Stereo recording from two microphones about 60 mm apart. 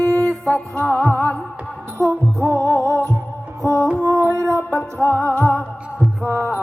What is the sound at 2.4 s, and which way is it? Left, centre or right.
Music, right.